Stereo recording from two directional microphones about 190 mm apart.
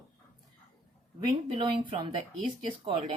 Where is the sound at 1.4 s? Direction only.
25° right (ahead or behind).